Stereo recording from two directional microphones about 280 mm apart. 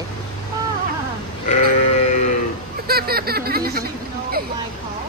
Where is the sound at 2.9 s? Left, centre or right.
Right.